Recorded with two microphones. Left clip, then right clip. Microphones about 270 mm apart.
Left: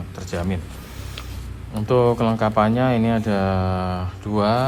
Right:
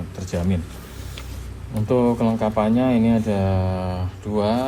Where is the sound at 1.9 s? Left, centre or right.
Left.